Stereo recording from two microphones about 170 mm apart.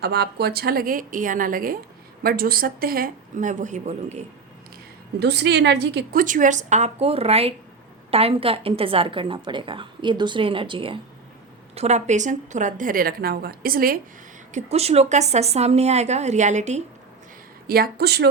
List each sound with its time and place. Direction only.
0.0 s a woman's voice: 70° right (ahead or behind); by 4.2 s 45° right (ahead or behind)
5.2 s a woman's voice: 80° right
6.1 s a woman's voice: 50° right (ahead or behind)
14.5 s a woman's voice: 40° right (ahead or behind)
17.7 s a woman's voice: 65° right (ahead or behind)